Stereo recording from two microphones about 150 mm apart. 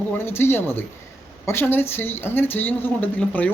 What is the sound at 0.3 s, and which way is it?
Speech, 15° left (ahead or behind).